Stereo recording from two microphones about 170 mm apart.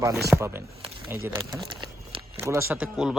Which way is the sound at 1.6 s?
30° right (ahead or behind).